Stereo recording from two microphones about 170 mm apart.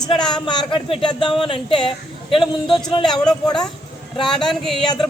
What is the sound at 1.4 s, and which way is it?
A man's voice, 30° left (ahead or behind).